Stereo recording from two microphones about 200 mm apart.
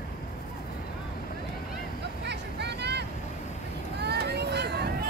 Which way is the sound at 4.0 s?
55° right (ahead or behind).